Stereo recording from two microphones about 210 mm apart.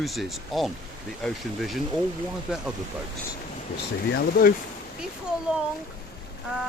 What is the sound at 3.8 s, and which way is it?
Speech, 50° left (ahead or behind).